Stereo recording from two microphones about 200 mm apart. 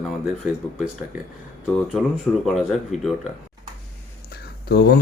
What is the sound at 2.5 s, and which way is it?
Speech, centre (ahead or behind).